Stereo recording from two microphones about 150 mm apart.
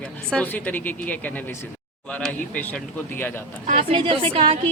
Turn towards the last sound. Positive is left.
turn(degrees=-40)  # may be behind; listen again after turning